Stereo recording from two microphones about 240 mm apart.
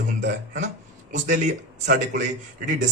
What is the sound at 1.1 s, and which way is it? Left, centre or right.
Speech, right.